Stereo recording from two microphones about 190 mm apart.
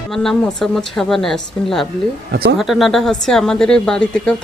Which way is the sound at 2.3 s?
60° right (ahead or behind).